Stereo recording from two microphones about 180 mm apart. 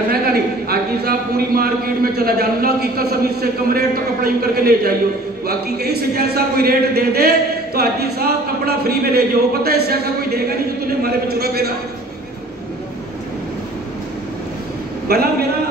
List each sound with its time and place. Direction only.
0.1 s a sound: 55° right (ahead or behind)
2.1 s a man's voice: 60° right (ahead or behind)
15.1 s a man's voice: 60° right (ahead or behind)